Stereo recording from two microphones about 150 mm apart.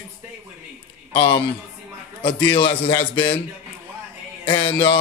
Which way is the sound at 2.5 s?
35° left (ahead or behind).